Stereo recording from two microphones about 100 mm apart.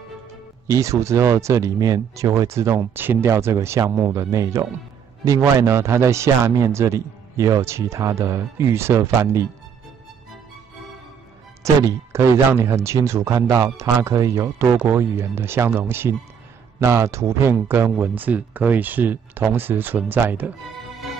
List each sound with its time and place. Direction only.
0.7 s speech: 30° right (ahead or behind)
2.8 s speech: 20° right (ahead or behind)
11.6 s speech: 30° right (ahead or behind)